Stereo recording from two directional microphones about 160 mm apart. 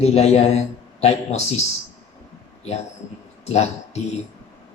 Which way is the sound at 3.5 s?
40° left (ahead or behind).